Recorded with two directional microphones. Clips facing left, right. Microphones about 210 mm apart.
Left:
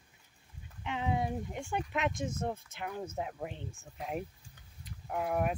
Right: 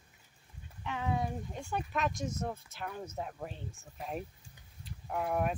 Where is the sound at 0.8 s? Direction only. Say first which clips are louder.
Left 1 dB; 20° left (ahead or behind).